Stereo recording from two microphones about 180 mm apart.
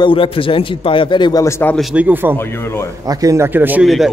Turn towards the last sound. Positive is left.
turn(degrees=0)  # may be behind; listen again after turning